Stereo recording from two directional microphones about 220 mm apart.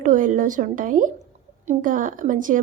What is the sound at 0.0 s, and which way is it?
A woman's voice, 35° right (ahead or behind).